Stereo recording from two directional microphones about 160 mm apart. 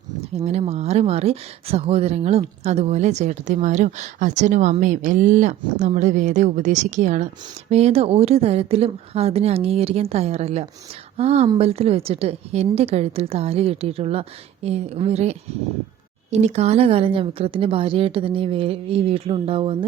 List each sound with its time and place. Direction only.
0.3 s a woman's voice: 40° right (ahead or behind)